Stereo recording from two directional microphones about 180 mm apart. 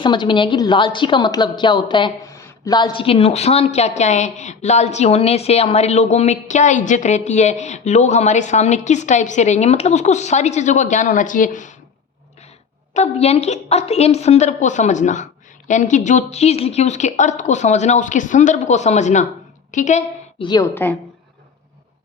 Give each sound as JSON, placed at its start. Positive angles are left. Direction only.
{"t": 0.0, "sound": "a woman's voice", "side_deg": 25}
{"t": 12.9, "sound": "a woman's voice", "side_deg": 35}
{"t": 20.4, "sound": "a woman's voice", "side_deg": 25}